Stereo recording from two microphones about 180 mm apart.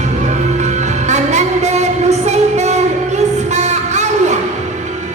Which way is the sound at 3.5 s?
40° right (ahead or behind).